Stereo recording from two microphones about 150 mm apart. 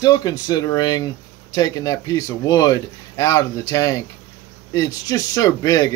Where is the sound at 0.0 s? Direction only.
25° left (ahead or behind).